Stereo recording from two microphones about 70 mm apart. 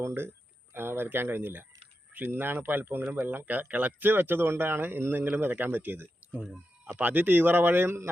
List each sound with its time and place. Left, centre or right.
0.0 s speech: right